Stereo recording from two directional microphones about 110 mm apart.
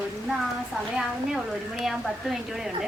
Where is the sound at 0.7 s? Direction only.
5° right (ahead or behind).